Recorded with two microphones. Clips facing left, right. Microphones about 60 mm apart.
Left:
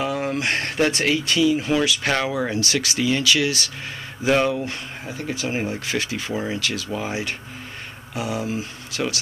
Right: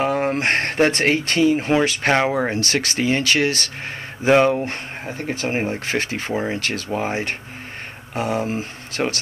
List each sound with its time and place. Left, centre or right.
0.0 s speech: right